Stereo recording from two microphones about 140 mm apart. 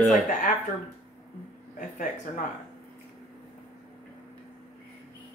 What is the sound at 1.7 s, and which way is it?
Speech, 70° left (ahead or behind).